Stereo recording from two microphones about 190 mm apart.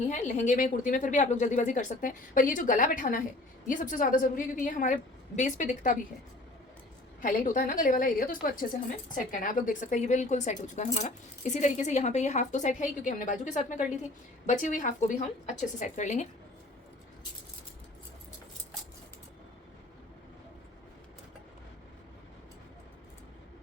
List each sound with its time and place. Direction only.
0.1 s a woman's voice: 40° left (ahead or behind)
7.2 s a woman's voice: 45° left (ahead or behind)